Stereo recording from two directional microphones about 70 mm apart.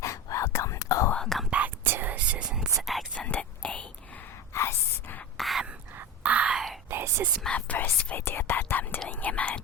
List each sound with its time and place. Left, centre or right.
0.0 s whispering: left
1.5 s whispering: centre
1.8 s whispering: right; by 2.6 s centre
2.8 s whispering: centre
3.2 s whispering: centre
4.5 s a sound: left
5.4 s a sound: centre
6.0 s whispering: centre
6.9 s whispering: right
7.4 s whispering: centre
8.2 s whispering: left